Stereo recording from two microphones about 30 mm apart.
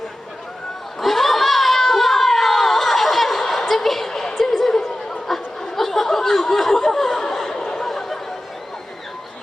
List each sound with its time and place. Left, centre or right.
0.9 s crowd: centre
3.7 s a sound: centre
4.1 s music: centre
4.7 s chatter: centre
5.3 s snicker: centre